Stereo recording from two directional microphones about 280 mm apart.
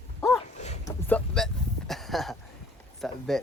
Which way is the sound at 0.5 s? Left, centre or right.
Left.